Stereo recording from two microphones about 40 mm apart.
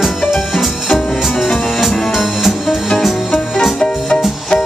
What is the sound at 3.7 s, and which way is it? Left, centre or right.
Music, centre.